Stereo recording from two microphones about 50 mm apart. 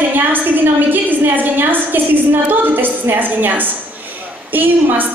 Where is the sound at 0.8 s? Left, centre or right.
Right.